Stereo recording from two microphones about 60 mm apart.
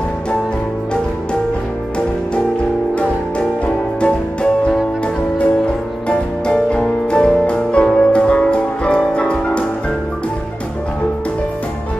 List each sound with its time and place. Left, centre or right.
3.0 s music: centre
6.0 s music: centre